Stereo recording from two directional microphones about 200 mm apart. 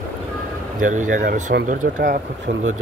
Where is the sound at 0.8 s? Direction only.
40° right (ahead or behind).